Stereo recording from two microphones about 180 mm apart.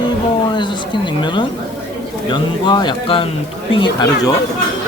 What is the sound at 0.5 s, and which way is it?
Speech, 25° left (ahead or behind).